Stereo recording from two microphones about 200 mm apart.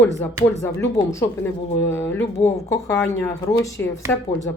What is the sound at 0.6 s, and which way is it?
Speech, 15° left (ahead or behind).